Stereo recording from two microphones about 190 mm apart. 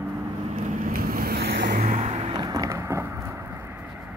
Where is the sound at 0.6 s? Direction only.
40° right (ahead or behind); by 1.8 s 55° right (ahead or behind).